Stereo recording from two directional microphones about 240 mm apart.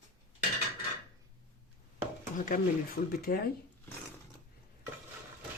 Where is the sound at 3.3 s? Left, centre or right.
Left.